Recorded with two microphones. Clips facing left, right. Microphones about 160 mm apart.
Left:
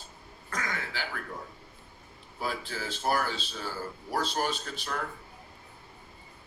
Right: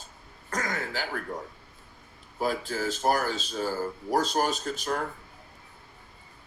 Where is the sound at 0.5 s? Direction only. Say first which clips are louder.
Right 4 dB; 40° right (ahead or behind).